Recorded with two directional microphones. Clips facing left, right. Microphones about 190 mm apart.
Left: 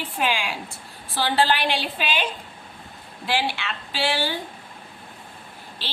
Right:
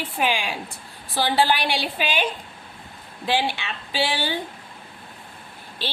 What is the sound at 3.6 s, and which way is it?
Speech, 15° right (ahead or behind).